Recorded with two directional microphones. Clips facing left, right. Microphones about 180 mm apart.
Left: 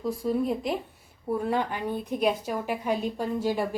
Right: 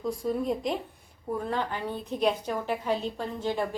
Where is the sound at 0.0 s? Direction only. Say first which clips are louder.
Left 2 dB; centre (ahead or behind).